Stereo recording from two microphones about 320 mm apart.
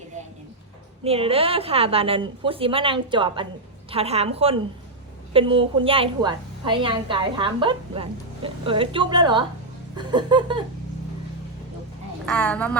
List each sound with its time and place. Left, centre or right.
1.0 s a woman's voice: centre
12.2 s a woman's voice: centre